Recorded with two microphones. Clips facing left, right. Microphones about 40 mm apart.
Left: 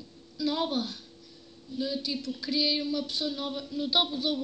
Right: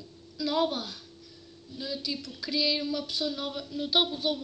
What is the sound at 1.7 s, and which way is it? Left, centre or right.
A woman's voice, centre.